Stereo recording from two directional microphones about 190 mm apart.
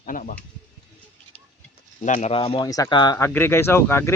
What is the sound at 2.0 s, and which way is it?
Speech, 40° left (ahead or behind).